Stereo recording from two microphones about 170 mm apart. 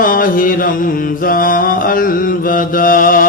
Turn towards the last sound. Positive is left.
turn(degrees=55)  # may be behind; listen again after turning